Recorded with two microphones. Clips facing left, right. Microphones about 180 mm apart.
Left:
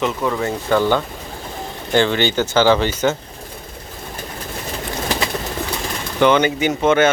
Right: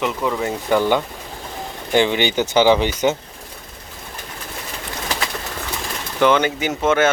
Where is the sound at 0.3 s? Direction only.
15° right (ahead or behind).